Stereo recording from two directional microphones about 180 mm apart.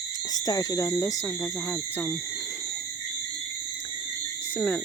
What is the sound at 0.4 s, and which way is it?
Speech, 20° left (ahead or behind).